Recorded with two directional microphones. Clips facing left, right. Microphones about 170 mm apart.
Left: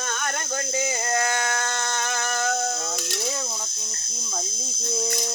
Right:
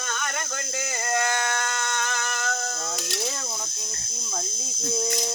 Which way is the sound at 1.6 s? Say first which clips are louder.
Left 1 dB; 30° left (ahead or behind).